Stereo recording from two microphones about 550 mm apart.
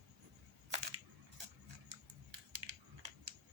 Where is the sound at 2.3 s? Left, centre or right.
Right.